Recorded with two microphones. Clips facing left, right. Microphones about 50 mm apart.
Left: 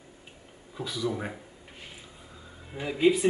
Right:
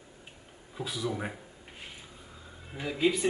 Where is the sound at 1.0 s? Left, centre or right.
Centre.